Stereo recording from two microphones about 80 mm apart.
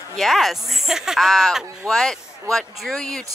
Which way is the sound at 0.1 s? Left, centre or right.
Centre.